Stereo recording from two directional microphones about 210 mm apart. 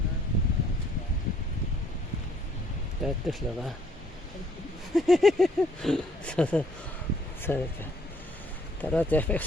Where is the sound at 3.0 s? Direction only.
Centre (ahead or behind).